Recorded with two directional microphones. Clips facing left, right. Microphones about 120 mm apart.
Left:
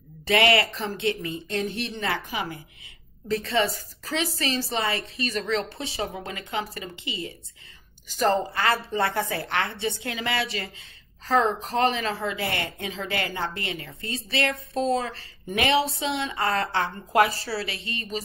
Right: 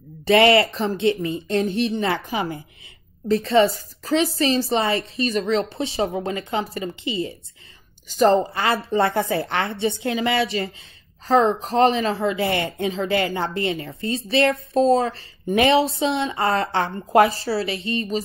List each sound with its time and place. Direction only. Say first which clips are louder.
0.2 s a woman's voice: right 6 dB; 30° right (ahead or behind)